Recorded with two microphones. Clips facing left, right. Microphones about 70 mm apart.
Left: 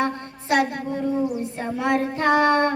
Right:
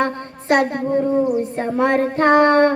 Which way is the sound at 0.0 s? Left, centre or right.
Right.